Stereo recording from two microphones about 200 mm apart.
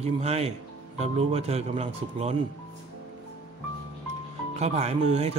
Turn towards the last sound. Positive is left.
turn(degrees=-30)  # may be behind; listen again after turning